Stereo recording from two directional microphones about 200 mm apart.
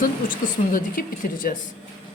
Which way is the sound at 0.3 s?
45° left (ahead or behind).